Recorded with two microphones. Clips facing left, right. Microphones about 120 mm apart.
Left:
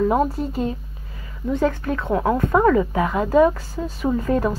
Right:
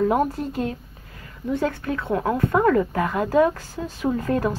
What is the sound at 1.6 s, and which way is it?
Speech, 45° left (ahead or behind).